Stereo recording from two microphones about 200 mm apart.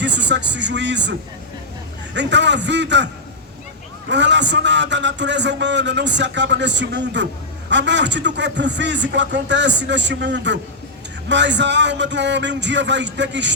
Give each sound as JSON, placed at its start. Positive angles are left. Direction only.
{"t": 0.0, "sound": "a man's voice", "side_deg": -60}
{"t": 2.1, "sound": "a man's voice", "side_deg": -60}
{"t": 4.1, "sound": "a man's voice", "side_deg": -60}